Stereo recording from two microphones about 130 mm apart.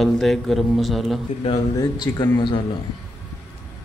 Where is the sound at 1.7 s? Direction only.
30° left (ahead or behind).